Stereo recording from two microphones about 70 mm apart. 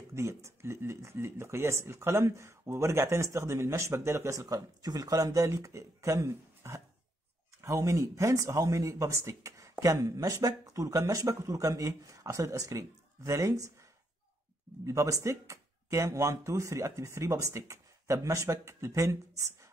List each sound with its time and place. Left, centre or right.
0.1 s speech: right
14.9 s speech: right